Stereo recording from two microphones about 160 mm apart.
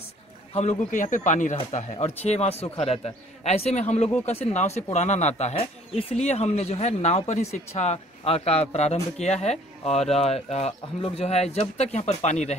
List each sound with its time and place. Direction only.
0.6 s speech: 45° left (ahead or behind)